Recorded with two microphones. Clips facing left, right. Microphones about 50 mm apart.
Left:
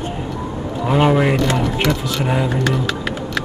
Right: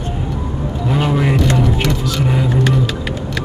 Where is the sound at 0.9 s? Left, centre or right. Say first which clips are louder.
Left 3 dB; centre.